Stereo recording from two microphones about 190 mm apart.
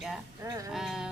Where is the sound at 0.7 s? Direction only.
Centre (ahead or behind).